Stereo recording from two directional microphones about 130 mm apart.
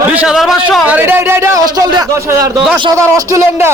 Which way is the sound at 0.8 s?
15° right (ahead or behind).